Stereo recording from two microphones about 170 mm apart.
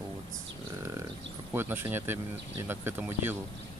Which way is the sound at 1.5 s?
10° right (ahead or behind).